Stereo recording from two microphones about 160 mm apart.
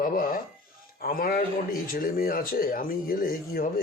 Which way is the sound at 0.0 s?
60° left (ahead or behind).